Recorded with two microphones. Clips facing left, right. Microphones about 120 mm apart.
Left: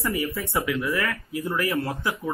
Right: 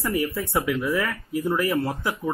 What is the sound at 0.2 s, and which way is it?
Speech, centre (ahead or behind).